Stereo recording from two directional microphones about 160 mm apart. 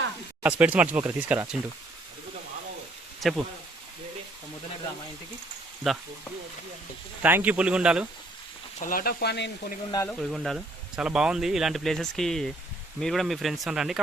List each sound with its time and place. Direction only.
0.4 s speech: 10° right (ahead or behind)
3.2 s speech: centre (ahead or behind)
5.8 s speech: centre (ahead or behind)
7.2 s speech: 10° right (ahead or behind)
8.8 s speech: 60° left (ahead or behind); by 9.7 s 90° left
10.1 s speech: centre (ahead or behind)